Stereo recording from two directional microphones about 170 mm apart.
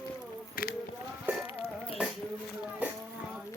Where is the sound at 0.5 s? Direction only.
60° left (ahead or behind).